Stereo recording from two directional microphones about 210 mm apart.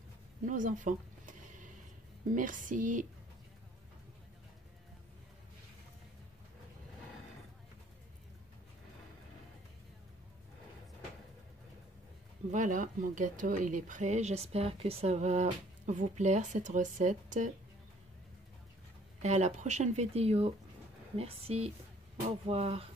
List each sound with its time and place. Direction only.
0.5 s a sound: 40° right (ahead or behind)
2.3 s speech: 40° right (ahead or behind)
12.4 s speech: 35° right (ahead or behind)
19.2 s speech: 30° right (ahead or behind)